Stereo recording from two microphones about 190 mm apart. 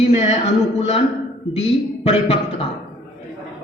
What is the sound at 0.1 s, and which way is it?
Speech, 35° left (ahead or behind).